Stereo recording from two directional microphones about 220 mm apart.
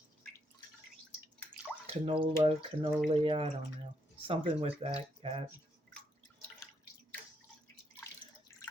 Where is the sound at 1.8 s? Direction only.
25° right (ahead or behind).